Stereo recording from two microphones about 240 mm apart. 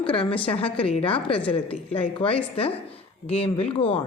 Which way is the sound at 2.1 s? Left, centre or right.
Left.